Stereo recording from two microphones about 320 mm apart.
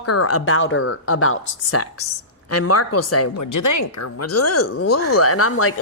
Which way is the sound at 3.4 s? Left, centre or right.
Left.